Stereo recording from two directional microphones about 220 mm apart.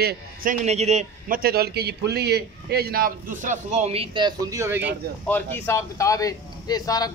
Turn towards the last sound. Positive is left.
turn(degrees=15)  # may be behind; listen again after turning